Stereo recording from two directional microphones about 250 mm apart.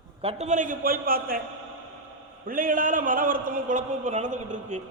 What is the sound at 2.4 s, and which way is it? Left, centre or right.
A man's voice, right.